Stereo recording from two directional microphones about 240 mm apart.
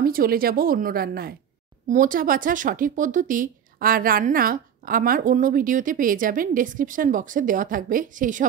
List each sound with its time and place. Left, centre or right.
0.0 s speech: right